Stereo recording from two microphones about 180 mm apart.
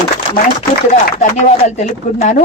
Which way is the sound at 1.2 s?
40° left (ahead or behind).